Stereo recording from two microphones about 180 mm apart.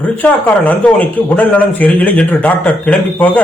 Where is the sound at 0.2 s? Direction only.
10° left (ahead or behind).